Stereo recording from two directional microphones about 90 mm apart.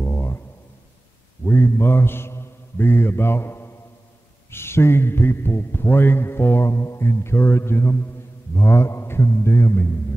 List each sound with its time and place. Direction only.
0.0 s a sound: 30° left (ahead or behind)
1.4 s mantra: 25° left (ahead or behind)
4.5 s speech: 25° left (ahead or behind)